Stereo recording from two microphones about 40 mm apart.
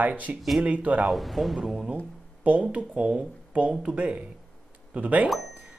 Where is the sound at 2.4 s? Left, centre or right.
Right.